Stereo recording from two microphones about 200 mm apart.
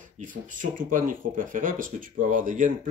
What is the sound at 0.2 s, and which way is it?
Speech, 40° right (ahead or behind).